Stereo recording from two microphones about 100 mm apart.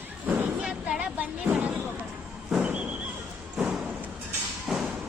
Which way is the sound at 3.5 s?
5° right (ahead or behind).